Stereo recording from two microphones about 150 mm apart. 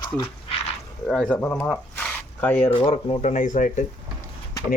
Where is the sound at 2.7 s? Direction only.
35° left (ahead or behind).